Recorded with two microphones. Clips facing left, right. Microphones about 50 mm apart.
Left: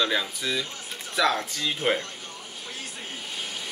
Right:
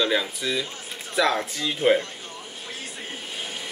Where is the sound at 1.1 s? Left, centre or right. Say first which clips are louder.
Right 2 dB; centre.